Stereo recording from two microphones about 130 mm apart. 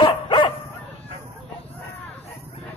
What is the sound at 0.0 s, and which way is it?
Bow-wow, 35° left (ahead or behind).